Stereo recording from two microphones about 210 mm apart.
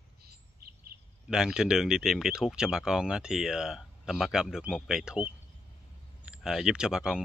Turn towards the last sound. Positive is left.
turn(degrees=-5)  # may be behind; listen again after turning